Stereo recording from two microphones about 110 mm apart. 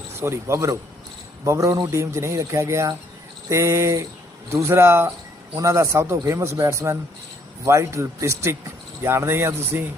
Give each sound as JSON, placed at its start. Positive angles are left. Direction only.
{"t": 0.2, "sound": "speech", "side_deg": -25}